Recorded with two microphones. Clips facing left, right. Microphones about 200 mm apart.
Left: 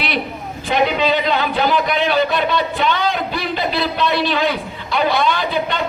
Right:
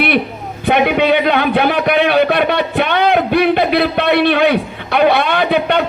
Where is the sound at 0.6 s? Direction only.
60° right (ahead or behind).